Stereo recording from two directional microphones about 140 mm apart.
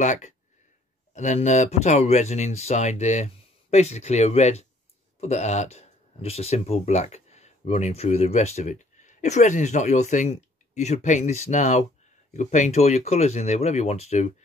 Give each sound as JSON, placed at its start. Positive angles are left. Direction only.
{"t": 0.0, "sound": "speech", "side_deg": 60}